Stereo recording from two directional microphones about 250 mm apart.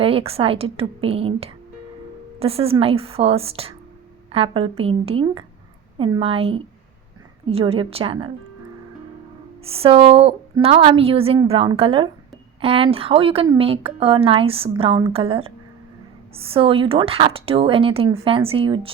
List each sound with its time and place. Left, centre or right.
0.0 s a woman's voice: right
9.6 s a woman's voice: right